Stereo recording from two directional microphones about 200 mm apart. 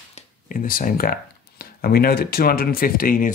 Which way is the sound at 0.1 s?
40° left (ahead or behind).